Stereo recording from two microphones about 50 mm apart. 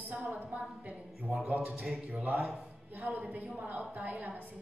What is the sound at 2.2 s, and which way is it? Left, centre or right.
A woman's voice, right.